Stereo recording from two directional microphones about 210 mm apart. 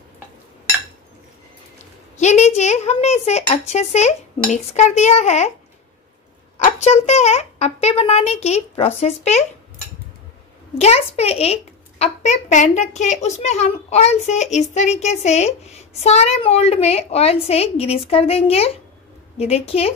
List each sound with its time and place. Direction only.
2.1 s a sound: 35° left (ahead or behind)
4.5 s speech: 35° left (ahead or behind)
6.6 s speech: 30° left (ahead or behind)
10.7 s a woman's voice: 30° left (ahead or behind)